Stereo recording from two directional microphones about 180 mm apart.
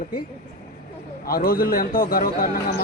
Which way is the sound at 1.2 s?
55° left (ahead or behind).